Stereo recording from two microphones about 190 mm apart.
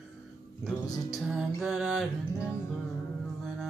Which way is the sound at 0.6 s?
Centre (ahead or behind).